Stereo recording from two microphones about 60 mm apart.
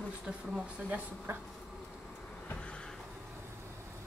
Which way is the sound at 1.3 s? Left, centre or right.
Right.